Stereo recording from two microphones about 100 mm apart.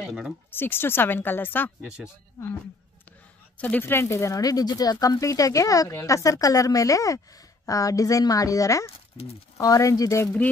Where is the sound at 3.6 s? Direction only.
20° left (ahead or behind).